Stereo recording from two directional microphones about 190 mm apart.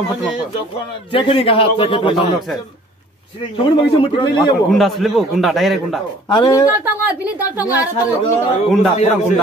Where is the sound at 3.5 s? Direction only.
25° left (ahead or behind).